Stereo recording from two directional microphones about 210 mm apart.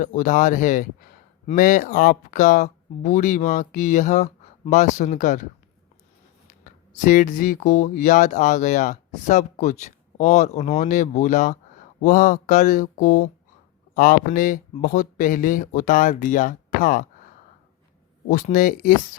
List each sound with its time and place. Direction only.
0.0 s speech: 40° left (ahead or behind)
6.9 s speech: 40° left (ahead or behind)
18.3 s speech: 40° left (ahead or behind)